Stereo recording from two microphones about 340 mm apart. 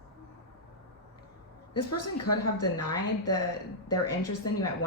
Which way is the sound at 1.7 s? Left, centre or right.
Left.